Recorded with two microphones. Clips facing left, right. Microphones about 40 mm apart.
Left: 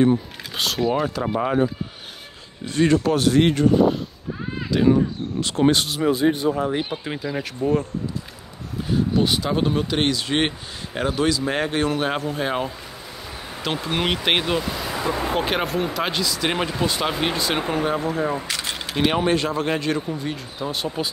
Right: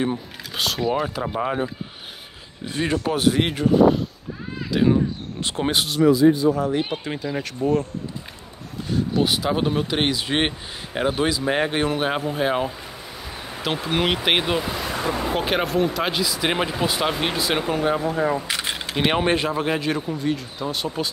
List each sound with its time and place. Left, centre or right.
0.0 s speech: centre
6.1 s speech: left
6.5 s speech: left
7.1 s speech: centre
9.2 s speech: centre
17.6 s speech: centre
17.8 s speech: centre
19.1 s speech: right
19.4 s speech: centre